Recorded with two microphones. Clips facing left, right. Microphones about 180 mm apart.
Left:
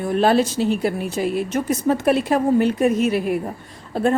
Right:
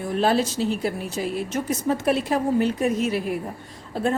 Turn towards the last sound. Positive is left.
turn(degrees=60)  # may be behind; listen again after turning